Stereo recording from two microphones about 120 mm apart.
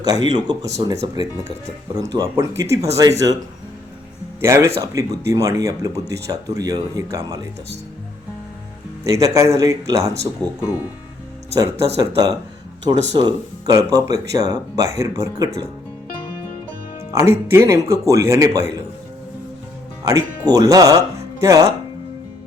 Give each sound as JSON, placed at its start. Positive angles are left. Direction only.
{"t": 0.0, "sound": "speech", "side_deg": -35}
{"t": 4.4, "sound": "speech", "side_deg": -25}
{"t": 9.0, "sound": "speech", "side_deg": -25}
{"t": 11.5, "sound": "speech", "side_deg": -25}
{"t": 17.2, "sound": "speech", "side_deg": -20}
{"t": 20.1, "sound": "speech", "side_deg": -30}